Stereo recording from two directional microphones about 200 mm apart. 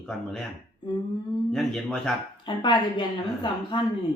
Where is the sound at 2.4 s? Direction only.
25° left (ahead or behind).